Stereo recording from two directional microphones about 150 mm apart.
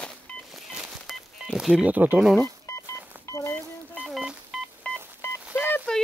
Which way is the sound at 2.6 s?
20° left (ahead or behind).